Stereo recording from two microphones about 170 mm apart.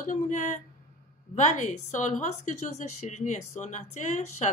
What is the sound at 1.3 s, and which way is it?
A woman's voice, 45° left (ahead or behind).